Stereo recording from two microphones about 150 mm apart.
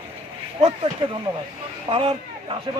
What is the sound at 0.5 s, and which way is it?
Speech, 40° right (ahead or behind).